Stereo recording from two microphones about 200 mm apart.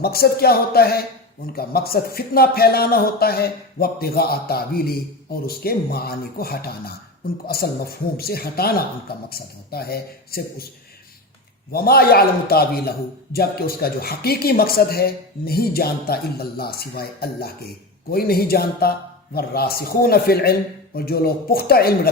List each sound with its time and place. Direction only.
0.0 s speech: 50° left (ahead or behind)
11.7 s speech: 50° left (ahead or behind)